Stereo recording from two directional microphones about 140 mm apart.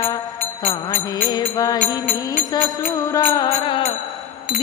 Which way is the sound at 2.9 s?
25° left (ahead or behind).